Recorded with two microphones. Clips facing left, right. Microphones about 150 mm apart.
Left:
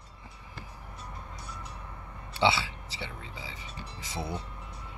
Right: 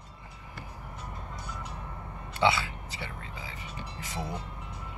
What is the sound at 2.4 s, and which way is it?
Speech, 25° left (ahead or behind).